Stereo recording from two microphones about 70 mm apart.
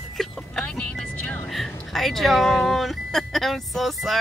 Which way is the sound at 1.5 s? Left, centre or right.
Centre.